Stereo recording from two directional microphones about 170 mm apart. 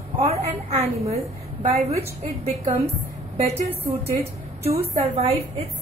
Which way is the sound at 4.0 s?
35° right (ahead or behind).